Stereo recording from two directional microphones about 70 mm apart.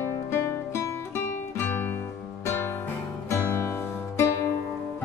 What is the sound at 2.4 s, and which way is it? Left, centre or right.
Music, left.